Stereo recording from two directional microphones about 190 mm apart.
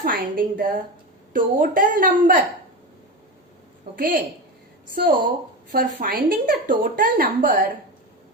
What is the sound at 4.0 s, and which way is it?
Speech, 45° right (ahead or behind).